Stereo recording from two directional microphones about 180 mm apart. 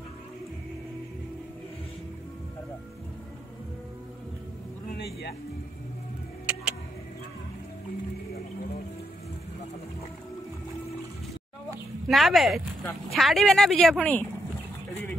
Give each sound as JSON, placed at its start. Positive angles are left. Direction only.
{"t": 4.8, "sound": "music", "side_deg": 65}
{"t": 6.5, "sound": "music", "side_deg": -10}
{"t": 12.1, "sound": "speech", "side_deg": 0}